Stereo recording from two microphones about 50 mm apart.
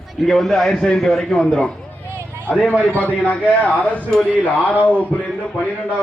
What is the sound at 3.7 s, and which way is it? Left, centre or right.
Speech, centre.